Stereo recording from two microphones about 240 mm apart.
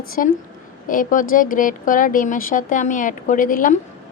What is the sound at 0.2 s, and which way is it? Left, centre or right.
Speech, left.